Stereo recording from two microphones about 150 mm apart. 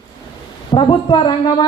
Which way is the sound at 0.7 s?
30° left (ahead or behind).